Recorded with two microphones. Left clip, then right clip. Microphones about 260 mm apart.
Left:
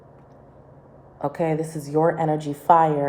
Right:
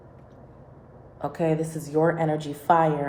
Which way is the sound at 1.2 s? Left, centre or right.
Left.